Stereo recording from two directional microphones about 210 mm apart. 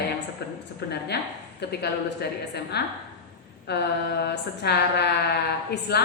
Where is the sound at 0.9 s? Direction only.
50° left (ahead or behind).